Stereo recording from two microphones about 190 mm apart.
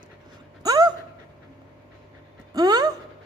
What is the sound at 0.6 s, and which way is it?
Dog, 20° right (ahead or behind).